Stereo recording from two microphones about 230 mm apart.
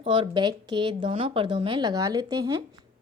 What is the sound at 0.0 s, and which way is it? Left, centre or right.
A woman's voice, right.